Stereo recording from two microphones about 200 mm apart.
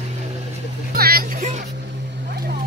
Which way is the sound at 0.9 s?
50° right (ahead or behind).